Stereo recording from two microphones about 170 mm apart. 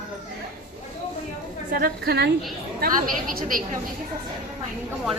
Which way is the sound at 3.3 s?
55° right (ahead or behind).